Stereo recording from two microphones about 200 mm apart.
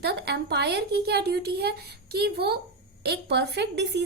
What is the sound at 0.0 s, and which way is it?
A woman's voice, 55° right (ahead or behind).